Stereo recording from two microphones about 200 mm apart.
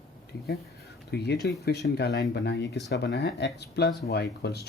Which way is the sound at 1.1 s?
55° left (ahead or behind).